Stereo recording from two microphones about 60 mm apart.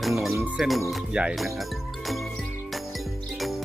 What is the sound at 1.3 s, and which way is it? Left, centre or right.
Music, centre.